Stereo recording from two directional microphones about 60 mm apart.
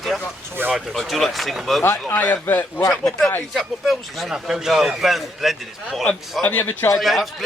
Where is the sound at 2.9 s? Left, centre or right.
Centre.